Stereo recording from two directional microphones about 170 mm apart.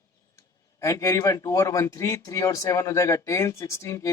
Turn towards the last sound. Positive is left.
turn(degrees=15)  # may be behind; listen again after turning